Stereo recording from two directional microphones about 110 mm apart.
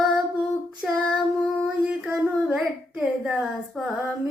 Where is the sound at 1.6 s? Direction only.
10° right (ahead or behind).